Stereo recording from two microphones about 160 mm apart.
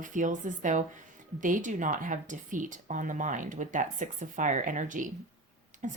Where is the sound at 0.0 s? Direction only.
50° right (ahead or behind).